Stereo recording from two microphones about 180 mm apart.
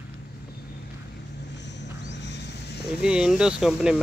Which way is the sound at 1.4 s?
75° left (ahead or behind).